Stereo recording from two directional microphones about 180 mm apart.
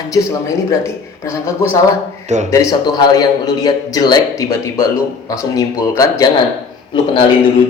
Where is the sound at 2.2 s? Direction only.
40° right (ahead or behind).